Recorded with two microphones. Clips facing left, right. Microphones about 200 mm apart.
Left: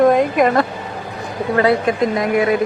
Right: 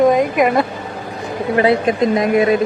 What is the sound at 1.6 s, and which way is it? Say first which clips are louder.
Speech: right 1 dB; 20° right (ahead or behind).